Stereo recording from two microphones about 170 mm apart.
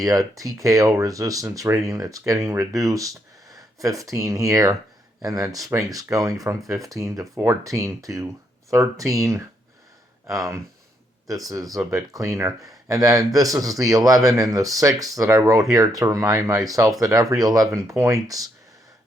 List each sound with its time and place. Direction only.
0.0 s speech: 20° right (ahead or behind)